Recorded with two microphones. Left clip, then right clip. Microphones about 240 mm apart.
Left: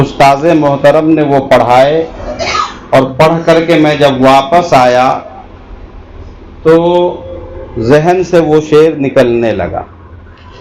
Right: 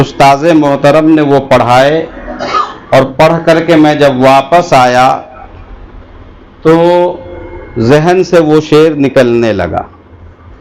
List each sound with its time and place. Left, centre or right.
0.0 s speech: right
3.2 s speech: right
6.7 s speech: right